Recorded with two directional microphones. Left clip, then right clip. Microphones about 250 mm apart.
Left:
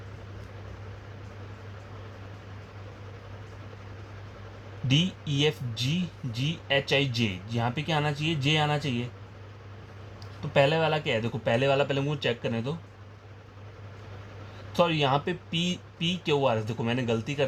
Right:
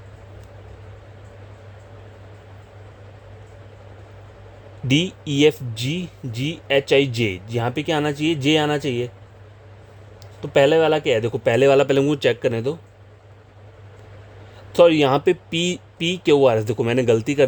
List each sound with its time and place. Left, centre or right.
4.9 s speech: right
10.4 s speech: right
14.7 s speech: right